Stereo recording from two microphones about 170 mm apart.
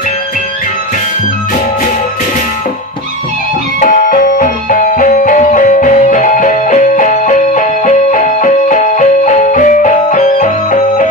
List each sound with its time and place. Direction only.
3.8 s music: 50° left (ahead or behind)